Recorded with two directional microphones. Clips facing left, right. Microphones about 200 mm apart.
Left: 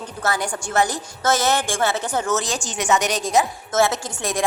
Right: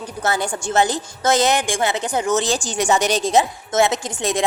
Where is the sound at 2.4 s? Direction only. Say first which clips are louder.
Right 3 dB; 30° right (ahead or behind).